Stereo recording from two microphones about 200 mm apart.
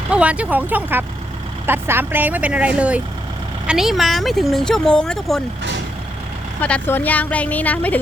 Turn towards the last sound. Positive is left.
turn(degrees=10)  # may be behind; listen again after turning